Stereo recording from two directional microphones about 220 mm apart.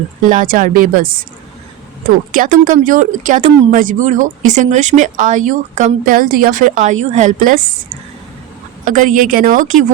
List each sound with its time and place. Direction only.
0.3 s speech: 40° right (ahead or behind)
8.9 s speech: 35° right (ahead or behind)